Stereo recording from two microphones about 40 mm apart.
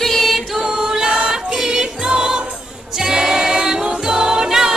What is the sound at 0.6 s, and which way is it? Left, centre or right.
Music, centre.